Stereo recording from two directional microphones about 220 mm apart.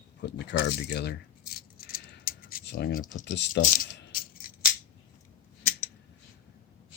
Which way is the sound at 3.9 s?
40° left (ahead or behind).